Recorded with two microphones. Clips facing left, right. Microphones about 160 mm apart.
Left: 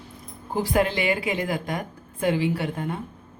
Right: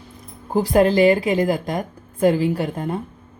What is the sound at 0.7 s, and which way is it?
A woman's voice, 40° right (ahead or behind).